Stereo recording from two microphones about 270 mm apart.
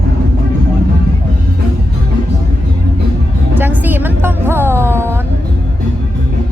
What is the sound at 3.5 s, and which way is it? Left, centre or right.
A woman's voice, centre.